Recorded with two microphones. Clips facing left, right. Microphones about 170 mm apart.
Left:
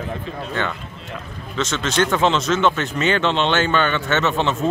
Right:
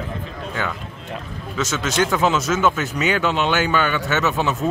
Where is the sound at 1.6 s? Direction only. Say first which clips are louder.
Left 1 dB; centre (ahead or behind).